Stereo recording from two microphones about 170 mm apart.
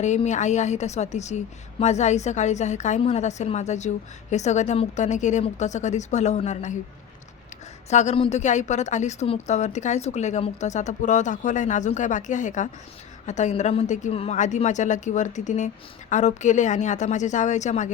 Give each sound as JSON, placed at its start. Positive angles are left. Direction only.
{"t": 0.0, "sound": "a woman's voice", "side_deg": 45}
{"t": 7.9, "sound": "a woman's voice", "side_deg": 40}